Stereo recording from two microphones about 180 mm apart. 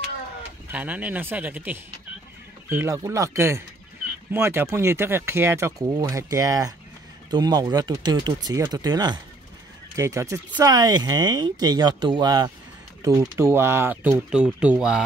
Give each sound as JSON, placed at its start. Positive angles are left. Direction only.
{"t": 0.7, "sound": "speech", "side_deg": -10}